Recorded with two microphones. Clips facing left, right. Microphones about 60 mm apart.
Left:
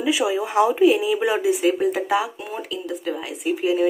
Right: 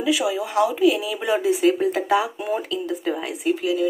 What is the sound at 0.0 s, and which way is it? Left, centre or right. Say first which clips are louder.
Speech: left 1 dB; centre.